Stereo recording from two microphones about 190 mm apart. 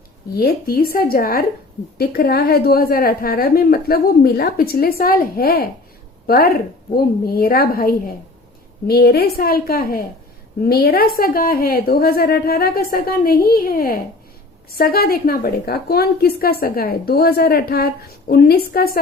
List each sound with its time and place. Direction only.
0.3 s a woman's voice: 50° left (ahead or behind)